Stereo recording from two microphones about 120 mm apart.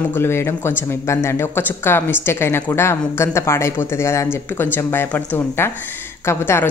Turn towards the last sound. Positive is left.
turn(degrees=20)  # may be behind; listen again after turning